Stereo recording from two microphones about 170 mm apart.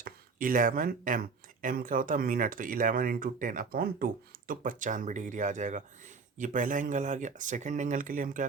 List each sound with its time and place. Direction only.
0.0 s speech: 55° right (ahead or behind)